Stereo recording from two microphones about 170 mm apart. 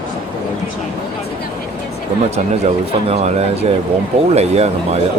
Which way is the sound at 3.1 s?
40° right (ahead or behind).